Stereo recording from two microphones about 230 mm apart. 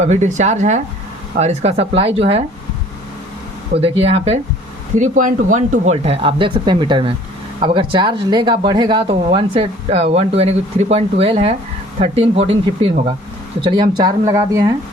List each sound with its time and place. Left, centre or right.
0.0 s speech: right
3.8 s speech: right